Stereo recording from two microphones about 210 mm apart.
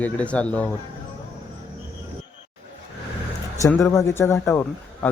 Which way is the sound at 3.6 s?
15° left (ahead or behind).